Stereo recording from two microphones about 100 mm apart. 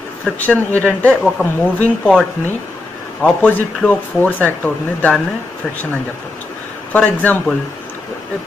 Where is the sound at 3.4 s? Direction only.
15° left (ahead or behind).